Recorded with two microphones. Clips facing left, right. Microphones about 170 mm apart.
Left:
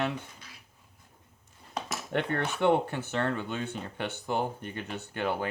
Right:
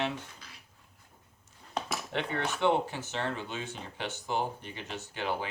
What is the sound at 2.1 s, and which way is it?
Speech, 50° left (ahead or behind).